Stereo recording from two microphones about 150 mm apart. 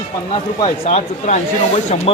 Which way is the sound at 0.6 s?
45° left (ahead or behind).